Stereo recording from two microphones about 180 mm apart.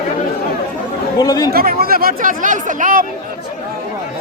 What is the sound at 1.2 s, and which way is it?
Chatter, 20° left (ahead or behind).